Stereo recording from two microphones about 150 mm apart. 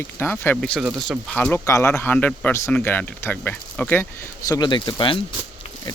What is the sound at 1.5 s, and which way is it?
Speech, 20° left (ahead or behind).